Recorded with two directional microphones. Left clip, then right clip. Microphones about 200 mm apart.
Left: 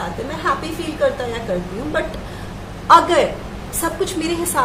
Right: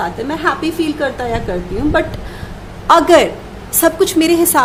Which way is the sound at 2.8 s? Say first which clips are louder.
Right 3 dB; 50° right (ahead or behind).